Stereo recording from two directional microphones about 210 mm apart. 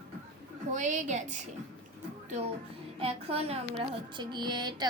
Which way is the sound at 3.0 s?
30° right (ahead or behind).